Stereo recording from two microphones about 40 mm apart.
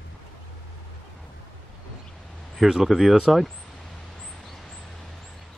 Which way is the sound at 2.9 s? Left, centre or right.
Centre.